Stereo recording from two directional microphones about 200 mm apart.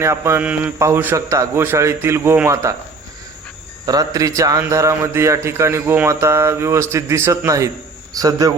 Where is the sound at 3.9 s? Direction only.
20° right (ahead or behind).